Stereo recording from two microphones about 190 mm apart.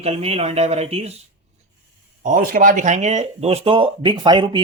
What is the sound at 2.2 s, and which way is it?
Speech, 45° right (ahead or behind).